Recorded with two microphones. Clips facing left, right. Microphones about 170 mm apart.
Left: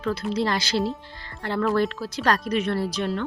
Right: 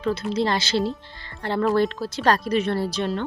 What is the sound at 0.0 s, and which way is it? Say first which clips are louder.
A woman's voice: right 2 dB; 20° right (ahead or behind).